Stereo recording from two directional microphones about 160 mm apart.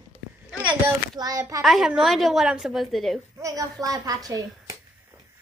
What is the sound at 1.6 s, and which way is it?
A woman's voice, centre (ahead or behind).